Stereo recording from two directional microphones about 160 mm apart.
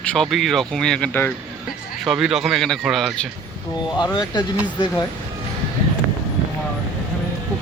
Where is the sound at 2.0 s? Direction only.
5° right (ahead or behind).